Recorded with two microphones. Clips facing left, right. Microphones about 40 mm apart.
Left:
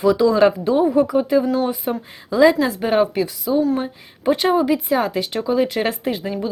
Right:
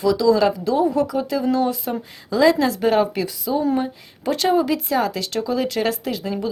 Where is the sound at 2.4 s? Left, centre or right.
Centre.